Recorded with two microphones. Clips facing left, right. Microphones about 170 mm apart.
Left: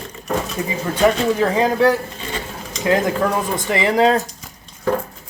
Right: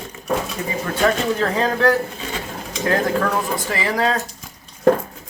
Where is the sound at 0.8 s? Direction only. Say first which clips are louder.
Left 3 dB; 15° left (ahead or behind).